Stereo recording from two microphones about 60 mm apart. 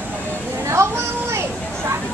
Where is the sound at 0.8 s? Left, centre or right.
Right.